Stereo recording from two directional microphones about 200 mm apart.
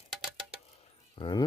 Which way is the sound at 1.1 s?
20° left (ahead or behind).